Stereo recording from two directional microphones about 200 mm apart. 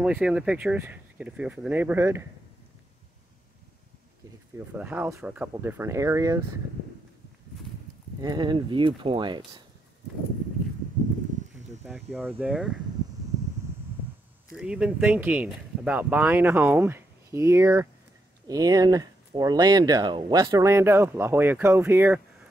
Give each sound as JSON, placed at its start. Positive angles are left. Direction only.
{"t": 0.0, "sound": "speech", "side_deg": -5}
{"t": 4.6, "sound": "speech", "side_deg": -10}
{"t": 8.2, "sound": "speech", "side_deg": -20}
{"t": 11.8, "sound": "speech", "side_deg": -10}
{"t": 14.5, "sound": "speech", "side_deg": -5}